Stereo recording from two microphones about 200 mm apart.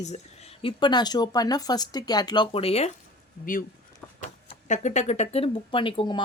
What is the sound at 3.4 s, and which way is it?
Speech, 45° left (ahead or behind).